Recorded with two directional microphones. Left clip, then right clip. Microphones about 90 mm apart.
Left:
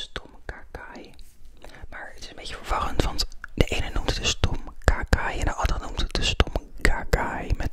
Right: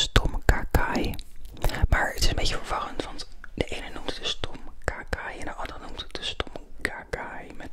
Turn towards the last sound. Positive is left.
turn(degrees=50)  # may be behind; listen again after turning